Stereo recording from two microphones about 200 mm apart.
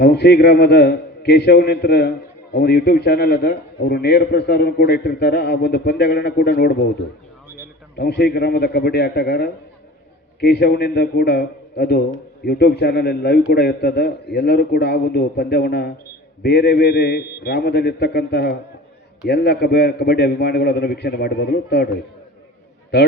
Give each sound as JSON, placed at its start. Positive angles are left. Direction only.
{"t": 0.0, "sound": "a man's voice", "side_deg": 55}
{"t": 7.9, "sound": "a man's voice", "side_deg": 55}
{"t": 22.9, "sound": "a man's voice", "side_deg": 55}